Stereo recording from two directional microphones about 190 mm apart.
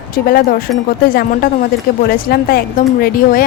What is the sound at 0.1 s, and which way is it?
Speech, 50° left (ahead or behind).